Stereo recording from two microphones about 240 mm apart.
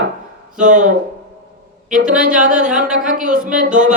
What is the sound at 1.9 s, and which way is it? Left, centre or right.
Speech, right.